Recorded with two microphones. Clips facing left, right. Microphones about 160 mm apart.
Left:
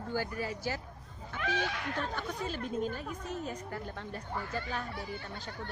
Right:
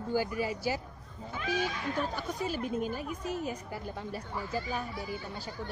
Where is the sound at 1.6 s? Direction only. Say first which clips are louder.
Right 2 dB; 65° left (ahead or behind).